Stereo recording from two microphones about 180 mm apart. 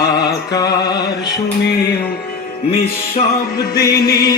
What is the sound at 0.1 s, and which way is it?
Music, 65° left (ahead or behind).